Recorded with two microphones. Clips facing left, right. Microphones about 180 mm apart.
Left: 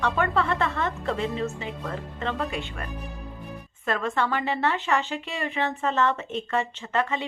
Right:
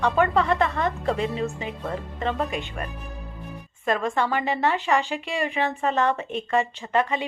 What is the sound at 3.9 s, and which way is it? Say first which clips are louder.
A woman's voice: right 2 dB; 15° right (ahead or behind).